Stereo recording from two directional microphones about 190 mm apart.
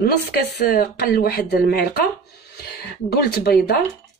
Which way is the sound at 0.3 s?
60° left (ahead or behind).